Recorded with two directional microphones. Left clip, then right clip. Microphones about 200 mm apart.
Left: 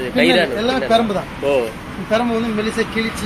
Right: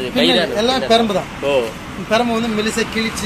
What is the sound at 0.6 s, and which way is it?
Speech, 40° right (ahead or behind).